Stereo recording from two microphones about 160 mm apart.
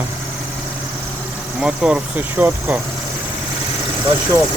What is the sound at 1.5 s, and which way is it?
Speech, 5° right (ahead or behind).